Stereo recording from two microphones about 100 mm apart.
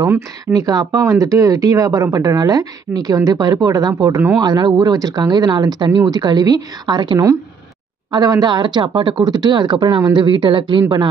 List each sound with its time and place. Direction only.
0.5 s speech: 40° right (ahead or behind); by 9.2 s 60° right (ahead or behind)
9.2 s speech: 45° right (ahead or behind)